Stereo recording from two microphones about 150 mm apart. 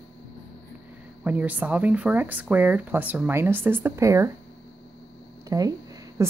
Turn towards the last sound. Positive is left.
turn(degrees=-20)  # may be behind; listen again after turning